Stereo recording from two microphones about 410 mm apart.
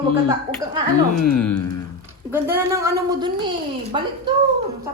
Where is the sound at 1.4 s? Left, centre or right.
Centre.